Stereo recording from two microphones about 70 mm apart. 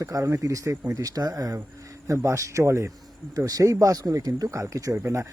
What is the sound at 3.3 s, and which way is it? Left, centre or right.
Speech, right.